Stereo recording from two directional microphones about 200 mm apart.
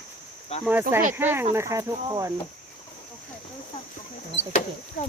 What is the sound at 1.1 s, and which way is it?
Speech, 10° right (ahead or behind).